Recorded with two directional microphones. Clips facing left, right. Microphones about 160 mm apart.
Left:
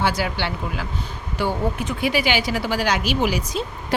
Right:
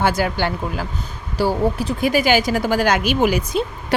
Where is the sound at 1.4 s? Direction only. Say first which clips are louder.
Right 5 dB; 35° right (ahead or behind).